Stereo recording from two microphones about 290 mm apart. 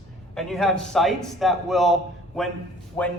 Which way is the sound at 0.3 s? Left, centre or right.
Centre.